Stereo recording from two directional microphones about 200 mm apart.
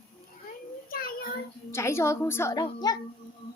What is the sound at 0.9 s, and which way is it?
Child singing, 45° left (ahead or behind).